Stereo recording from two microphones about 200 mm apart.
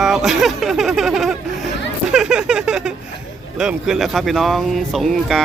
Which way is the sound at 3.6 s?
5° right (ahead or behind).